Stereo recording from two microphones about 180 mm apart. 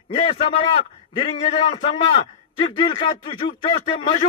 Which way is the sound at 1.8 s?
35° left (ahead or behind).